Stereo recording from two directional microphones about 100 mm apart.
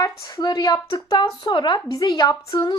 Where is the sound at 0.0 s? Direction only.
40° left (ahead or behind).